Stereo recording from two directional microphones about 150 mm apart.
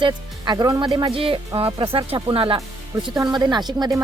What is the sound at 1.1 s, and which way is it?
Speech, 35° right (ahead or behind).